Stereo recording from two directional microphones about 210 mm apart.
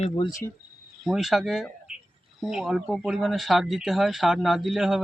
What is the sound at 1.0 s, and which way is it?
Speech, centre (ahead or behind).